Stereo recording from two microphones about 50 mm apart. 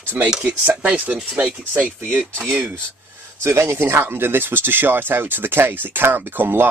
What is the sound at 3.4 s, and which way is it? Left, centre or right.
Speech, right.